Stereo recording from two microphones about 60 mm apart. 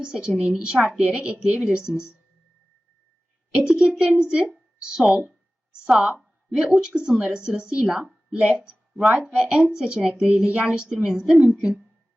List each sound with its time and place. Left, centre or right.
0.0 s a woman's voice: centre
3.5 s a woman's voice: centre
6.5 s a woman's voice: centre